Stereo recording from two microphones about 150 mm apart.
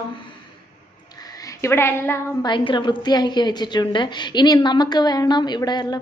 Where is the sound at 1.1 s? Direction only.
25° left (ahead or behind).